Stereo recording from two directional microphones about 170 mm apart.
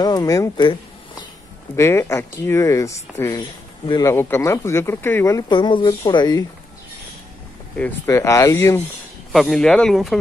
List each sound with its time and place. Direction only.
0.0 s speech: 20° left (ahead or behind)
1.8 s speech: 15° left (ahead or behind)
7.7 s speech: 15° left (ahead or behind)
9.3 s speech: centre (ahead or behind)